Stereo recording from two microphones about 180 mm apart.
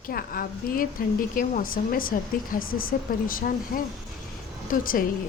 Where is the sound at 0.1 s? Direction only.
55° left (ahead or behind).